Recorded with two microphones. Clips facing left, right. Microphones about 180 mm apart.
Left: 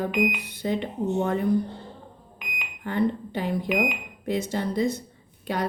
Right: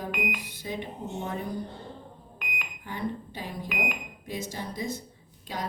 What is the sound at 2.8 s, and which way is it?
Speech, 65° left (ahead or behind).